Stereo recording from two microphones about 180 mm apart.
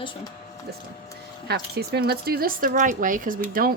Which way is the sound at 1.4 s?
65° right (ahead or behind).